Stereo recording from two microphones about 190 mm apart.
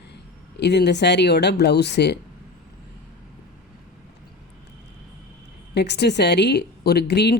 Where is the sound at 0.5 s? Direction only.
60° left (ahead or behind).